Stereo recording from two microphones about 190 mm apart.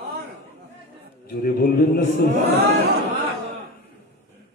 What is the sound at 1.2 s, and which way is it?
Speech, 50° left (ahead or behind).